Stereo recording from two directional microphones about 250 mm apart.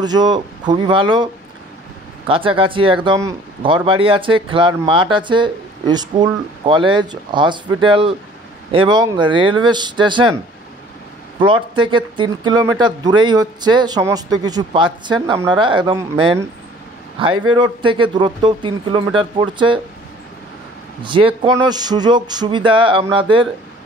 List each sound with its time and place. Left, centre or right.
0.0 s speech: centre
11.3 s speech: centre
17.5 s speech: centre
21.0 s speech: centre